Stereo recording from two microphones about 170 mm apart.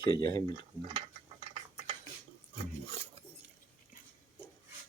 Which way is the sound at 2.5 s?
35° right (ahead or behind).